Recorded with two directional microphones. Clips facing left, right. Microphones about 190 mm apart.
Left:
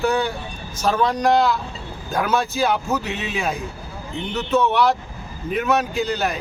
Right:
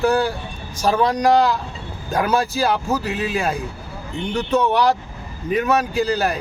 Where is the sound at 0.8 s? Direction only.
10° right (ahead or behind).